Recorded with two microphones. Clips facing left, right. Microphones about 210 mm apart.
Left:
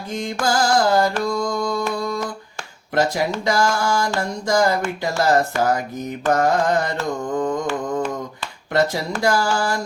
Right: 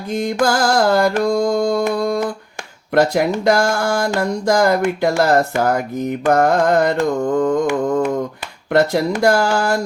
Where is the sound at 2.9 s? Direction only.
55° right (ahead or behind).